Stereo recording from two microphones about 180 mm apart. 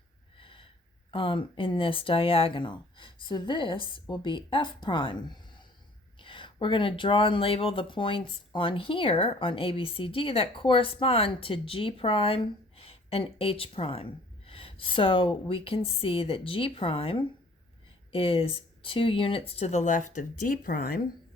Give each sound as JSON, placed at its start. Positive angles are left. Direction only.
{"t": 0.3, "sound": "snort", "side_deg": 30}
{"t": 1.1, "sound": "speech", "side_deg": 30}